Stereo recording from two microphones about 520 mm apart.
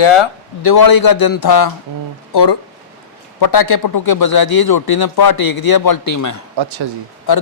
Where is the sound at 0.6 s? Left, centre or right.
Left.